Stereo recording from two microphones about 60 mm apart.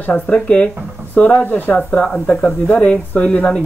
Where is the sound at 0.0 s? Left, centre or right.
Left.